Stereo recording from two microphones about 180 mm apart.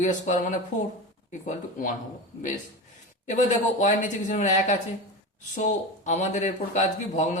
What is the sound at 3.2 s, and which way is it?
Speech, 45° left (ahead or behind).